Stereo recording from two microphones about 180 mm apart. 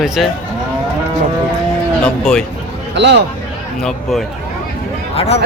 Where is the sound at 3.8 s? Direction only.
Centre (ahead or behind).